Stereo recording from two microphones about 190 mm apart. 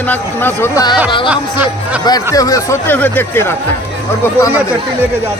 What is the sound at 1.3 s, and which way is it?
Speech, 5° right (ahead or behind).